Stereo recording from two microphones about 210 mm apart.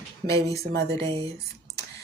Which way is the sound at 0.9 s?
15° left (ahead or behind).